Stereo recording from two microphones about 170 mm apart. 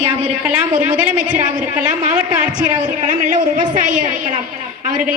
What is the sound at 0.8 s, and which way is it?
Speech, 10° right (ahead or behind).